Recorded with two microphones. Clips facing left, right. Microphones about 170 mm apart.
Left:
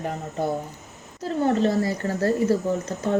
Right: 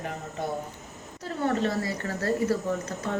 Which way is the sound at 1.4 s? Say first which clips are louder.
Left 5 dB; 30° left (ahead or behind).